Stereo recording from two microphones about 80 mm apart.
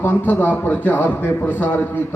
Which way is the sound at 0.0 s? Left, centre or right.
Left.